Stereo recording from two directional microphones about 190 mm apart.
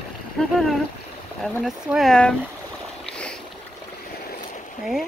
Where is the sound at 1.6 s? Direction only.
Centre (ahead or behind).